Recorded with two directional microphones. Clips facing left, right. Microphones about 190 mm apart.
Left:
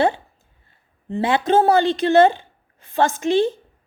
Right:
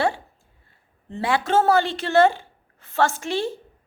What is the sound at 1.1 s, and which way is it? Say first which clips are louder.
A woman's voice: left 4 dB; 20° left (ahead or behind).